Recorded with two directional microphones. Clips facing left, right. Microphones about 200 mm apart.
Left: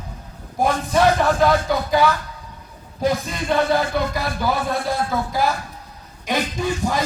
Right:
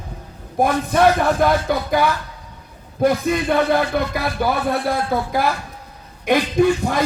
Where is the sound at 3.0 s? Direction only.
55° right (ahead or behind).